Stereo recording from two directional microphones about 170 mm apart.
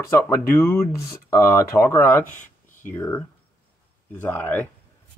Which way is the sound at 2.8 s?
10° left (ahead or behind).